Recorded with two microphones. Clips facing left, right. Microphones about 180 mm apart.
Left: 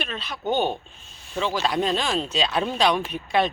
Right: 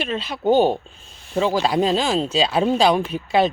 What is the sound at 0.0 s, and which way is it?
Speech, 25° right (ahead or behind).